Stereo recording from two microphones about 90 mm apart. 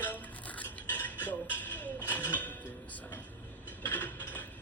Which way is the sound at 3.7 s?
20° left (ahead or behind).